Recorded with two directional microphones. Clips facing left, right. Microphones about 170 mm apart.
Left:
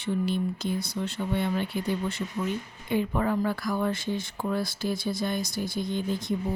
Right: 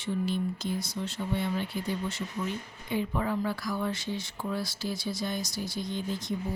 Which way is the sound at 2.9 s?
55° left (ahead or behind).